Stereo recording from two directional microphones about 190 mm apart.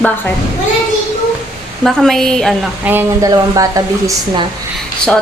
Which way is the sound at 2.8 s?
10° right (ahead or behind).